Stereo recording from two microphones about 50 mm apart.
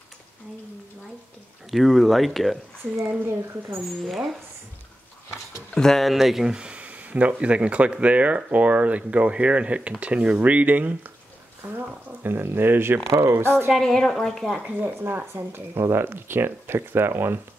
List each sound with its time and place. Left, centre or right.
1.7 s speech: centre
3.2 s speech: right
4.0 s speech: centre
5.8 s speech: centre
6.1 s speech: centre; by 11.0 s right
11.8 s speech: right
13.1 s speech: right
13.8 s speech: centre
14.8 s speech: right